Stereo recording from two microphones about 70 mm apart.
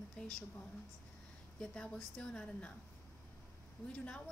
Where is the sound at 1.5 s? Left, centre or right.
Centre.